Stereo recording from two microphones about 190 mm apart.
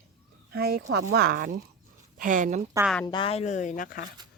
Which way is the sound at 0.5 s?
55° right (ahead or behind).